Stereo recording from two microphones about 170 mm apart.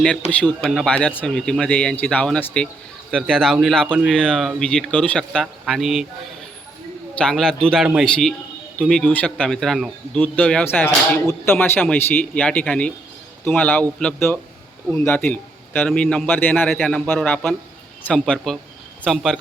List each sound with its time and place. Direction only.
0.0 s speech: 5° left (ahead or behind)
7.2 s a man's voice: 5° left (ahead or behind)